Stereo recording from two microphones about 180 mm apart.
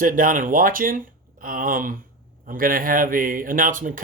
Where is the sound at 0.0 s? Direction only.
50° right (ahead or behind).